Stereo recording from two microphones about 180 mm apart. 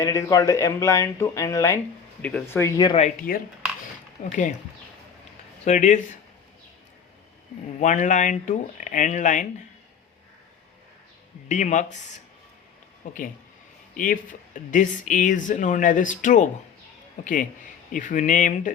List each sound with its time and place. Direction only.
0.0 s speech: 20° left (ahead or behind)
2.9 s speech: 35° left (ahead or behind)
5.6 s speech: 40° left (ahead or behind)
7.8 s speech: 40° left (ahead or behind)
11.4 s speech: 45° left (ahead or behind)
13.9 s speech: 50° left (ahead or behind)